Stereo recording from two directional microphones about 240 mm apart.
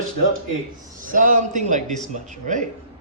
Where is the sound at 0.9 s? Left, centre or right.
Right.